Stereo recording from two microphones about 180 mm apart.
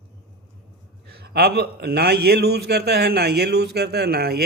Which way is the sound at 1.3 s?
60° right (ahead or behind).